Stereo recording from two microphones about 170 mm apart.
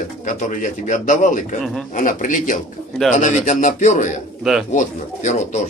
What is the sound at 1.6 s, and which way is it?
Speech, centre (ahead or behind).